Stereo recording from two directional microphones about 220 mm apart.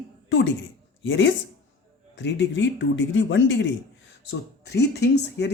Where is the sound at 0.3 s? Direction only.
55° left (ahead or behind).